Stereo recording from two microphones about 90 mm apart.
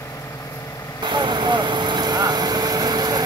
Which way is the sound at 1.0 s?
55° right (ahead or behind).